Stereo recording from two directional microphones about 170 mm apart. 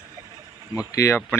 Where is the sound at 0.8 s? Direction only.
15° left (ahead or behind).